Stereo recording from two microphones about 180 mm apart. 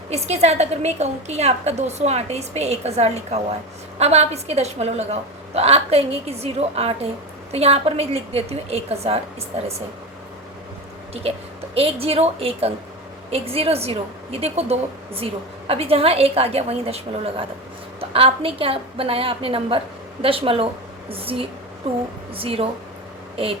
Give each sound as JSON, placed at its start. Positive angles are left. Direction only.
{"t": 0.1, "sound": "a woman's voice", "side_deg": -35}
{"t": 11.1, "sound": "a woman's voice", "side_deg": -35}